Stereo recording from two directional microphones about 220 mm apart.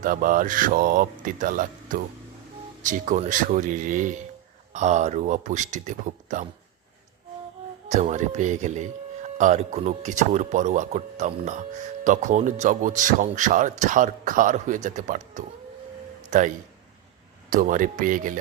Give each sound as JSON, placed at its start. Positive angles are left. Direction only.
{"t": 0.0, "sound": "speech", "side_deg": -40}
{"t": 7.9, "sound": "speech", "side_deg": -30}
{"t": 17.5, "sound": "speech", "side_deg": -35}